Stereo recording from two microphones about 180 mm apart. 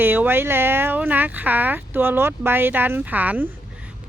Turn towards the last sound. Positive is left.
turn(degrees=-10)  # may be behind; listen again after turning